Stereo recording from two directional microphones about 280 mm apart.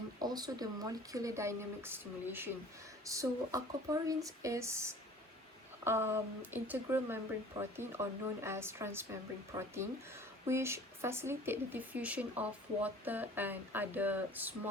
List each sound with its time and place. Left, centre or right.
0.2 s speech: centre